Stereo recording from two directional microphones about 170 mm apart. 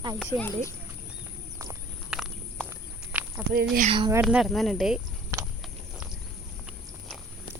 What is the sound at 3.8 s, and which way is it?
Speech, 30° right (ahead or behind).